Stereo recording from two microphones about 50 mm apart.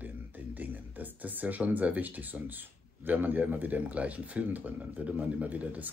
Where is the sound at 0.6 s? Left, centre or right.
Right.